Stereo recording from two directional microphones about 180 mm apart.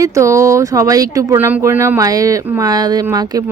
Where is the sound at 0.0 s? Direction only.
15° right (ahead or behind).